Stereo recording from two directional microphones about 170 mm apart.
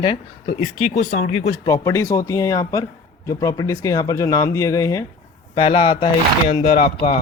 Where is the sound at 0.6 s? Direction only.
45° left (ahead or behind).